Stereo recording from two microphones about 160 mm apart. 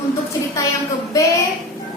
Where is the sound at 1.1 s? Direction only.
20° left (ahead or behind).